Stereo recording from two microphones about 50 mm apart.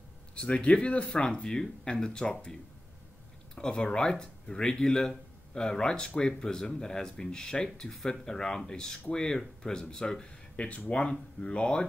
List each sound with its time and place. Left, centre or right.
0.3 s speech: left
3.5 s speech: centre
10.5 s a sound: left
10.8 s speech: left